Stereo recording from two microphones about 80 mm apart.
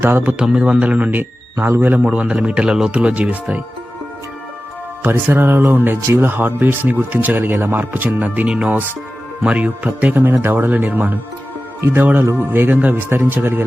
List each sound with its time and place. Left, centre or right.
0.0 s speech: right
2.0 s speech: centre
5.0 s speech: right
12.2 s speech: right